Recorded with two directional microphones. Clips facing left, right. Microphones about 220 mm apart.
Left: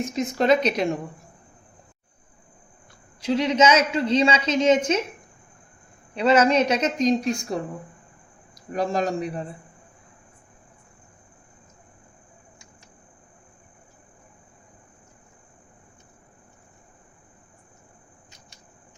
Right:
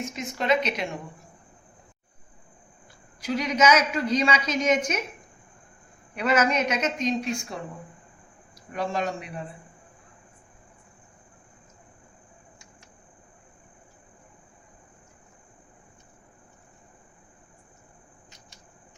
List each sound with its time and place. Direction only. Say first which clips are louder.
0.0 s a woman's voice: left 8 dB; 35° left (ahead or behind)
3.2 s a woman's voice: left 4 dB; 25° left (ahead or behind)
6.1 s a woman's voice: left 5 dB; 30° left (ahead or behind)
8.7 s a woman's voice: left 4 dB; 40° left (ahead or behind)